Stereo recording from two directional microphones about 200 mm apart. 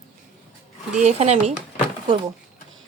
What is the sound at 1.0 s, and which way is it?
Speech, 35° right (ahead or behind).